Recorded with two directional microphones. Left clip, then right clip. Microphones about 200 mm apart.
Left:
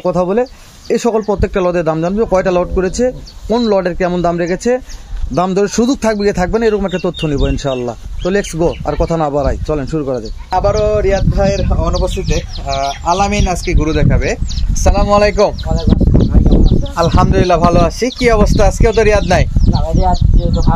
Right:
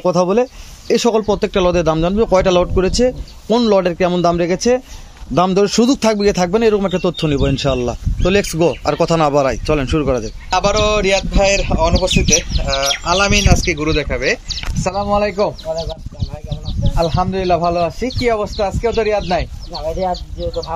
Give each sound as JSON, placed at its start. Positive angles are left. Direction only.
{"t": 0.0, "sound": "a man's voice", "side_deg": -5}
{"t": 10.6, "sound": "a sound", "side_deg": 35}
{"t": 11.6, "sound": "speech", "side_deg": 45}
{"t": 16.9, "sound": "speech", "side_deg": 50}